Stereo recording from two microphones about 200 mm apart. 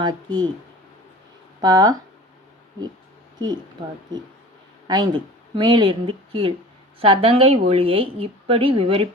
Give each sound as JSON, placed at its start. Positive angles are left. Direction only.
{"t": 0.0, "sound": "a woman's voice", "side_deg": -20}
{"t": 1.6, "sound": "a woman's voice", "side_deg": -20}
{"t": 3.3, "sound": "speech", "side_deg": -20}
{"t": 4.9, "sound": "a woman's voice", "side_deg": -20}